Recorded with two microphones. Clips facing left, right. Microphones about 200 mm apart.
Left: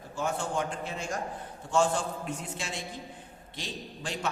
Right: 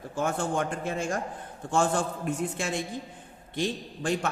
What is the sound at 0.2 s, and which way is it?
A man's voice, 50° right (ahead or behind).